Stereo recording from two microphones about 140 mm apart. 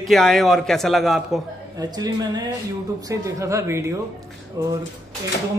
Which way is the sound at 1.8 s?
30° right (ahead or behind).